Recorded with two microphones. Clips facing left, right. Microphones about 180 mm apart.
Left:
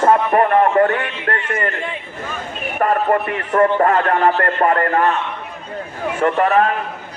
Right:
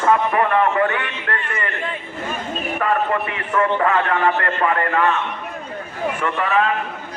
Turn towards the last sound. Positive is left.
turn(degrees=40)  # may be behind; listen again after turning